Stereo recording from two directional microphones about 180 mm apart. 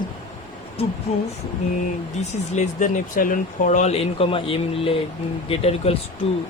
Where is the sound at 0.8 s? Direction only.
35° left (ahead or behind).